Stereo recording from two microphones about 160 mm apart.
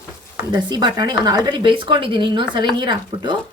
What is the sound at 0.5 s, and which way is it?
Speech, 25° right (ahead or behind).